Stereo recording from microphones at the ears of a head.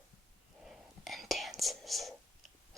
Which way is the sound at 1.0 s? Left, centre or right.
Centre.